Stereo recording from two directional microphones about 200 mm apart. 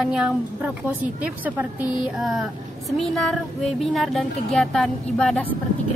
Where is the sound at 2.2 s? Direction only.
Centre (ahead or behind).